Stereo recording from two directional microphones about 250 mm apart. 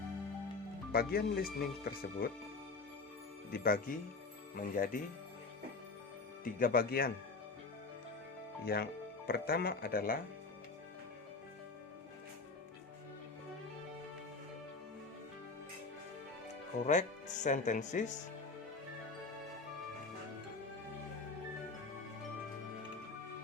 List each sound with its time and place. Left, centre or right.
0.9 s speech: left
3.5 s speech: left
6.4 s speech: left
8.6 s speech: left
16.8 s speech: left